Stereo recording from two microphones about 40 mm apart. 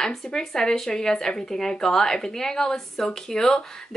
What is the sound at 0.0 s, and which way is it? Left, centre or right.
Speech, centre.